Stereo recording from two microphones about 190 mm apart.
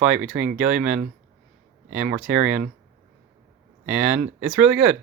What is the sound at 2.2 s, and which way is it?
Speech, 5° right (ahead or behind).